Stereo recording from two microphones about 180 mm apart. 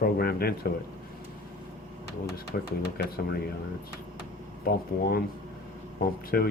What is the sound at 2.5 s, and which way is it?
Speech, 50° left (ahead or behind).